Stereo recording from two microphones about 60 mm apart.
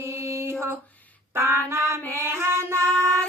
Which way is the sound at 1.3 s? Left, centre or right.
Right.